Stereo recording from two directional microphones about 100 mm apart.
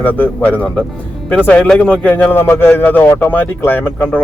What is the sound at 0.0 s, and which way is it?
Speech, 15° left (ahead or behind).